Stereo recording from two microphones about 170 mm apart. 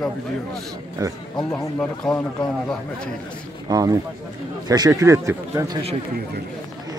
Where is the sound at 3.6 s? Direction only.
20° right (ahead or behind).